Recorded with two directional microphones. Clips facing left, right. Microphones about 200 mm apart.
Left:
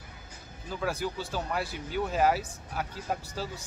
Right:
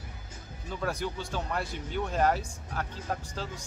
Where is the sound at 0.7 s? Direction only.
5° left (ahead or behind).